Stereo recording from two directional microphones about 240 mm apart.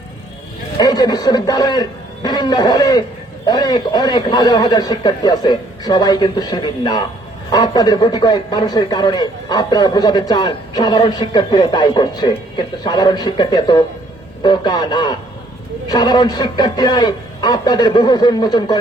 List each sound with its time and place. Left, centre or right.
0.8 s a man's voice: centre